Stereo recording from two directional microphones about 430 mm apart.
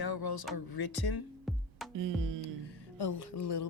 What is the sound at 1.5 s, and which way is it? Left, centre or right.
Music, centre.